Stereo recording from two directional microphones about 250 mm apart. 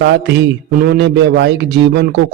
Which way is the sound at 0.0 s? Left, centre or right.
Right.